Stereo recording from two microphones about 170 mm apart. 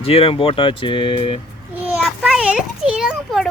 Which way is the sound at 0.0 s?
35° left (ahead or behind).